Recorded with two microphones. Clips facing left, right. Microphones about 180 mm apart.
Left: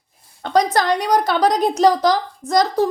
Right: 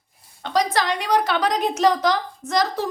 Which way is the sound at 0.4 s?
45° left (ahead or behind).